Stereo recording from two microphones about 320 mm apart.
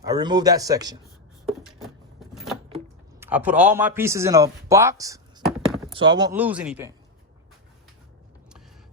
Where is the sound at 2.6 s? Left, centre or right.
Centre.